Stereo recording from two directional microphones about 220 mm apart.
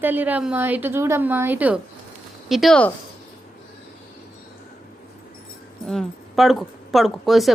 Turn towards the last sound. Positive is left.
turn(degrees=0)  # may be behind; listen again after turning